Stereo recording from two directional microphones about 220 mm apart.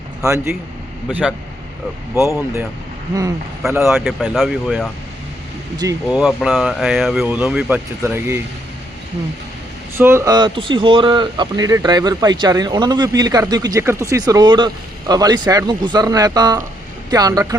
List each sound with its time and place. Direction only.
0.3 s speech: 10° right (ahead or behind)
3.7 s speech: 10° right (ahead or behind)
3.9 s speech: centre (ahead or behind)
5.7 s speech: 15° right (ahead or behind)
6.1 s speech: centre (ahead or behind)
10.0 s speech: 10° right (ahead or behind)